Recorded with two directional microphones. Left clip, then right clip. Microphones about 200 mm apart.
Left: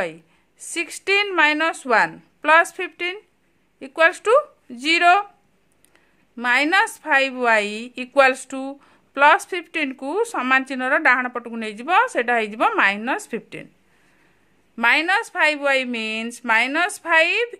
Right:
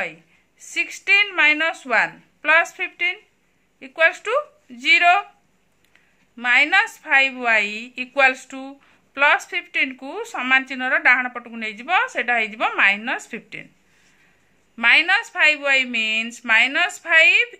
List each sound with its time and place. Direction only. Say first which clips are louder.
0.7 s a woman's voice: right 3 dB; 60° left (ahead or behind)
6.3 s a woman's voice: right 1 dB; 60° left (ahead or behind)
14.8 s a woman's voice: right 2 dB; 55° left (ahead or behind)